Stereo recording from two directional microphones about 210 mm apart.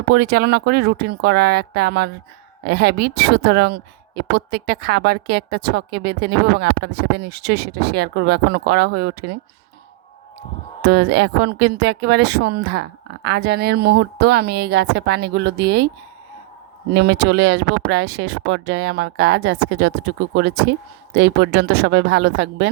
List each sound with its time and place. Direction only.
0.1 s speech: 50° right (ahead or behind)
10.8 s speech: 50° right (ahead or behind)
16.9 s speech: 50° right (ahead or behind)